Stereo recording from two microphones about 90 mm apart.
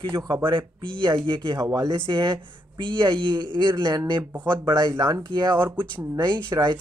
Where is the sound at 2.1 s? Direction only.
60° right (ahead or behind).